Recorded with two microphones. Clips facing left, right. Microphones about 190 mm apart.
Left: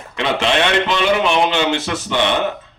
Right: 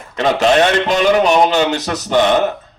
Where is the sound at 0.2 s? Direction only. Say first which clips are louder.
Right 5 dB; 40° right (ahead or behind).